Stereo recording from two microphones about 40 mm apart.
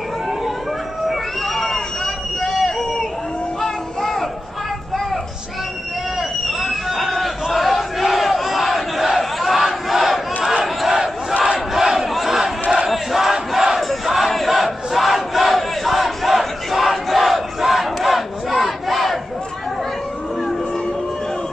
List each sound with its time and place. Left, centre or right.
1.0 s a sound: centre
3.6 s music: centre
6.1 s a sound: centre
7.5 s battle cry: centre
11.3 s crowd: right
11.7 s battle cry: centre